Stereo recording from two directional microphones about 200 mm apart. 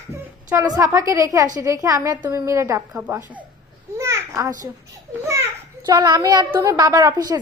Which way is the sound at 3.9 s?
15° right (ahead or behind).